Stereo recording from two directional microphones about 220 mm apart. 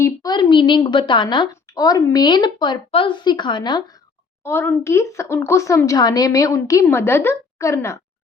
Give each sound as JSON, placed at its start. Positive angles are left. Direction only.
{"t": 0.0, "sound": "a woman's voice", "side_deg": 15}